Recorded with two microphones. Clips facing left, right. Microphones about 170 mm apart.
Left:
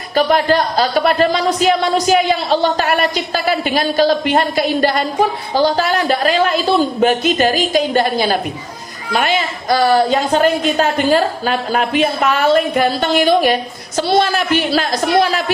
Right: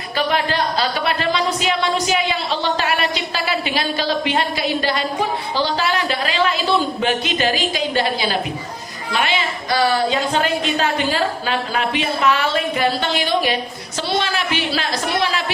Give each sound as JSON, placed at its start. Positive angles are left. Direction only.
{"t": 0.1, "sound": "speech", "side_deg": 45}